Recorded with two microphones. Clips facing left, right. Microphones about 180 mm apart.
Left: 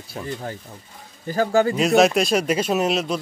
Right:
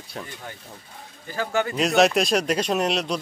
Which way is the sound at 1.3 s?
40° left (ahead or behind).